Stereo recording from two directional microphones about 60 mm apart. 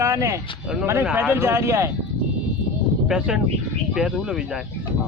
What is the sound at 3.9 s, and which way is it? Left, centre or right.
Speech, centre.